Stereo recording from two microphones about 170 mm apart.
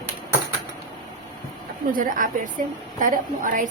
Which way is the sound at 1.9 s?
50° right (ahead or behind).